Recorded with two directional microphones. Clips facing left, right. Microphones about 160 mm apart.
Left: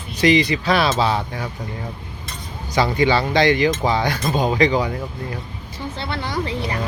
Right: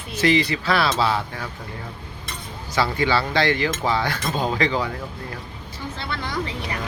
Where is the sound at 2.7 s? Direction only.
20° left (ahead or behind).